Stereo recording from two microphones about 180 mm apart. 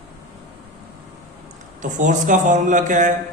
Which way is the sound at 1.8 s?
45° right (ahead or behind).